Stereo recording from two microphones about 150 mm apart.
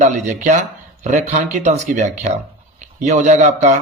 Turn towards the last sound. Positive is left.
turn(degrees=-50)  # may be behind; listen again after turning